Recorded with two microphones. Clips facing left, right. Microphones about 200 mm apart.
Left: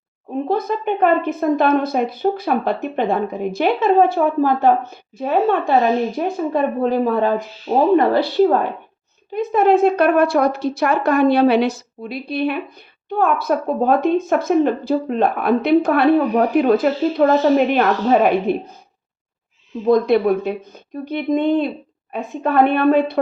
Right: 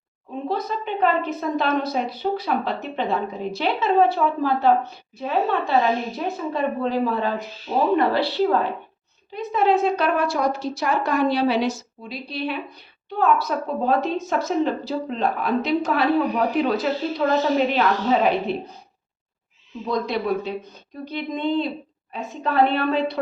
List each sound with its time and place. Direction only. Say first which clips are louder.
0.4 s a woman's voice: left 6 dB; 55° left (ahead or behind)
19.9 s a woman's voice: left 9 dB; 55° left (ahead or behind)